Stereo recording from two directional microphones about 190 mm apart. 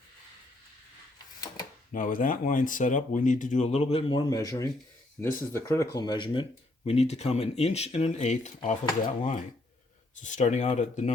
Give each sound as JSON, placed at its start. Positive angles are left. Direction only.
{"t": 1.9, "sound": "speech", "side_deg": 45}
{"t": 4.3, "sound": "speech", "side_deg": 20}